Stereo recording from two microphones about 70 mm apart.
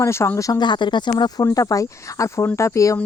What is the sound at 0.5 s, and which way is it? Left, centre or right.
Speech, left.